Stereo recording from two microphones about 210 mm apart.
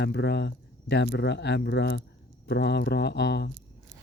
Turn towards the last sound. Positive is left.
turn(degrees=55)  # may be behind; listen again after turning